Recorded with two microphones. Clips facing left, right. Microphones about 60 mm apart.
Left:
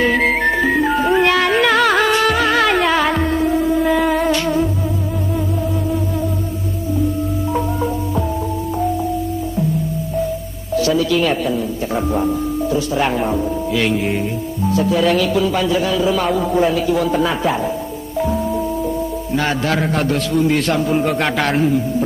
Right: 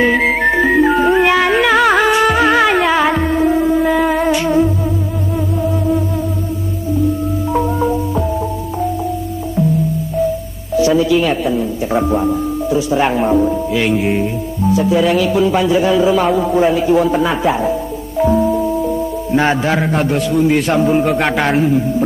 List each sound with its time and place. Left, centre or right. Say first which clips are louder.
0.0 s music: right 2 dB; centre
7.5 s marimba: right 6 dB; centre
10.8 s music: right 4 dB; right
11.1 s speech: right 2 dB; centre
19.3 s speech: right 4 dB; right; by 21.7 s centre